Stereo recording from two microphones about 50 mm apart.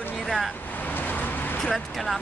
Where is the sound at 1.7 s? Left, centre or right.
Centre.